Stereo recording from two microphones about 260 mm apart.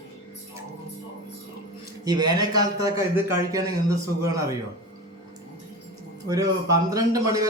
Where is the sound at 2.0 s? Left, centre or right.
Centre.